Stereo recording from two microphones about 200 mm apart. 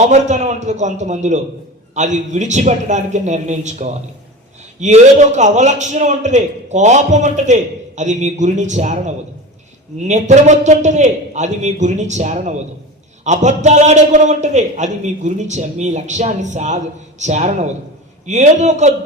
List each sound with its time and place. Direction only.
0.1 s a man's voice: 35° right (ahead or behind)